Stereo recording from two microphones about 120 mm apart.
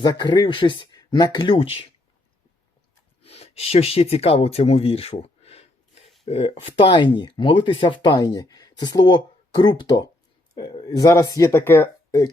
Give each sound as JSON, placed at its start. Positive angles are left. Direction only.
{"t": 0.0, "sound": "speech", "side_deg": 35}
{"t": 1.5, "sound": "speech", "side_deg": 55}
{"t": 3.2, "sound": "speech", "side_deg": 60}